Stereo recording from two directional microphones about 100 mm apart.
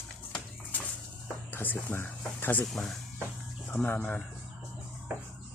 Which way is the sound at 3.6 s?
15° left (ahead or behind).